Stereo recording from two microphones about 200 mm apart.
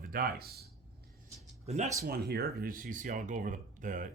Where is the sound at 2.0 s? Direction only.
50° right (ahead or behind).